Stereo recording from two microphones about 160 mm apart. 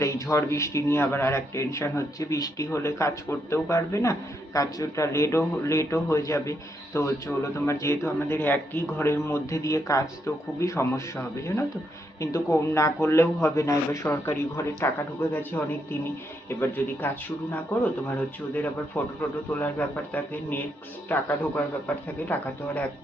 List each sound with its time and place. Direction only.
0.0 s speech: 20° left (ahead or behind)
19.0 s speech: 10° left (ahead or behind)